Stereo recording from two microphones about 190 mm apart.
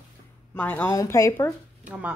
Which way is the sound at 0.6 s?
10° left (ahead or behind).